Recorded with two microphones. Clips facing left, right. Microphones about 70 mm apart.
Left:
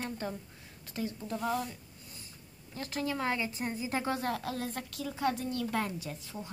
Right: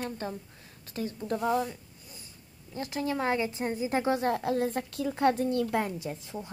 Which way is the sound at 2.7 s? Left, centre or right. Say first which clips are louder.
Right 3 dB; centre.